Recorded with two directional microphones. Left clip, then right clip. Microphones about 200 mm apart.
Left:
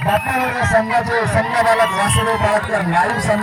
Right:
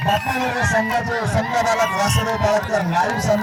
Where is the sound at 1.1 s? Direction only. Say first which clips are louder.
Left 4 dB; 45° right (ahead or behind).